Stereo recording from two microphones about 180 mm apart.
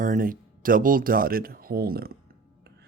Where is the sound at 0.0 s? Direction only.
50° right (ahead or behind).